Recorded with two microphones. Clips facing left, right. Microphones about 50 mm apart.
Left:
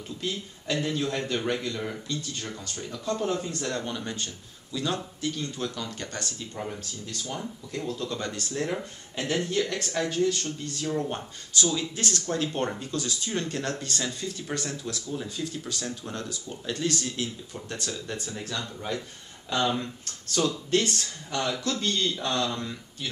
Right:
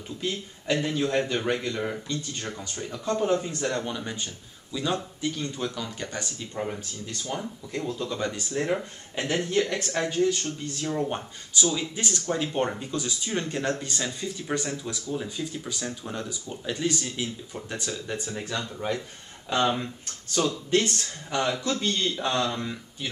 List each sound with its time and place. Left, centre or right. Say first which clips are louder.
0.2 s speech: right 2 dB; centre